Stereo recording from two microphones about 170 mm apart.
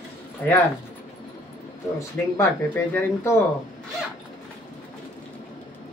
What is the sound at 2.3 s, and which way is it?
Speech, 15° left (ahead or behind).